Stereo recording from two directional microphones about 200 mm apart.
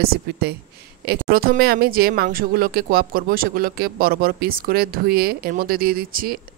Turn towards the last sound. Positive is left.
turn(degrees=-45)  # may be behind; listen again after turning